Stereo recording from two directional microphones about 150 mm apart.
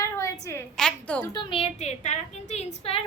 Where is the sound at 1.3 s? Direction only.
35° left (ahead or behind).